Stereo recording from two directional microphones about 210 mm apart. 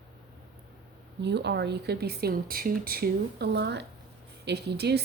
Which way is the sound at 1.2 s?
55° right (ahead or behind).